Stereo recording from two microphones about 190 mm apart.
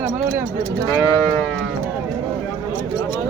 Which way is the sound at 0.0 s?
45° right (ahead or behind).